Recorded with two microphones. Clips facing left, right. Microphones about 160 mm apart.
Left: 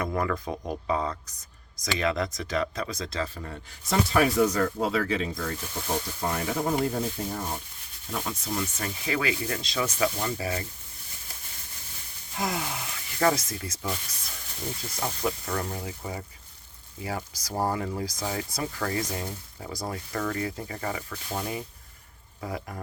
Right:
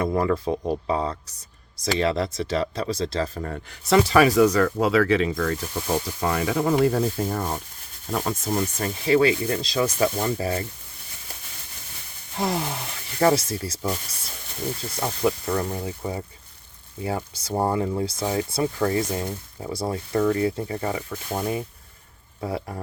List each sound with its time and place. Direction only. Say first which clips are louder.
0.0 s speech: right 6 dB; 30° right (ahead or behind)
3.3 s speech: right 7 dB; 55° right (ahead or behind); by 7.3 s 90° right
7.3 s rub: right 6 dB; 55° right (ahead or behind)
8.0 s speech: right 6 dB; 50° right (ahead or behind)
12.4 s speech: right 5 dB; 35° right (ahead or behind)
15.0 s speech: right 6 dB; 30° right (ahead or behind)
21.1 s speech: right 6 dB; 45° right (ahead or behind)
22.4 s speech: right 6 dB; 30° right (ahead or behind)